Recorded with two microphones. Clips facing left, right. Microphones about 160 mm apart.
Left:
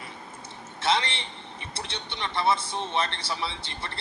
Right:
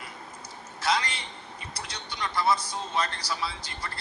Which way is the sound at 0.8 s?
25° left (ahead or behind).